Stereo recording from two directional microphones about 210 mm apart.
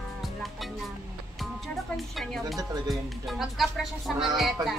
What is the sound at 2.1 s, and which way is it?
Speech, centre (ahead or behind).